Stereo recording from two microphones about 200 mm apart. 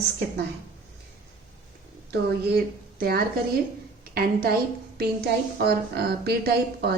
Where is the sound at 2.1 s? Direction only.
50° right (ahead or behind).